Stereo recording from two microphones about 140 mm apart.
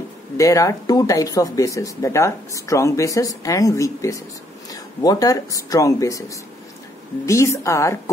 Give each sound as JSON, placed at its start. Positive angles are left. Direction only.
{"t": 0.4, "sound": "speech", "side_deg": 25}